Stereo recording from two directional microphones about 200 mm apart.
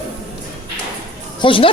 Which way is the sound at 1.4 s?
25° left (ahead or behind).